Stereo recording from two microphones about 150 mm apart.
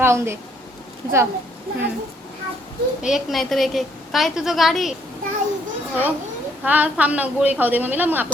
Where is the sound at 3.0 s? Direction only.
Centre (ahead or behind).